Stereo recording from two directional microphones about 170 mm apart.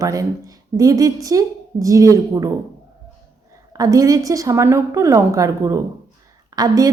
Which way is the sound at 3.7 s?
20° right (ahead or behind).